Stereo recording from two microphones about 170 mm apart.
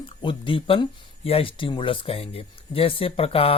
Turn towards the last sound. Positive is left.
turn(degrees=35)  # may be behind; listen again after turning